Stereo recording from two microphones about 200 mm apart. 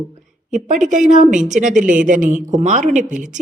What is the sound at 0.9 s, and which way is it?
A woman's voice, 40° right (ahead or behind).